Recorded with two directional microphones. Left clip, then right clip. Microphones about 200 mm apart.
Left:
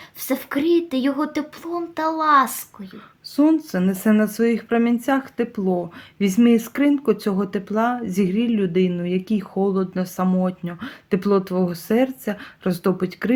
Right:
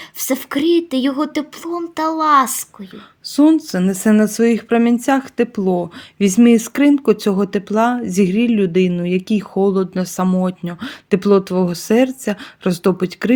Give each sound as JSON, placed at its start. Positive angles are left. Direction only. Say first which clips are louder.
{"t": 0.2, "sound": "speech", "louder": "right 4 dB", "side_deg": -35}